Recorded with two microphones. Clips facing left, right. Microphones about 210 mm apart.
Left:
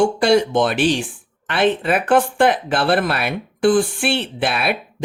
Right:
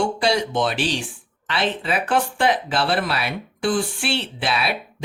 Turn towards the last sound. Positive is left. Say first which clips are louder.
# left 3 dB
turn(degrees=55)  # may be behind; listen again after turning